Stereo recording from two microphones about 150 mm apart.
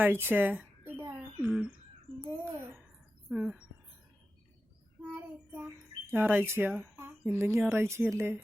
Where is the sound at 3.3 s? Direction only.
5° right (ahead or behind).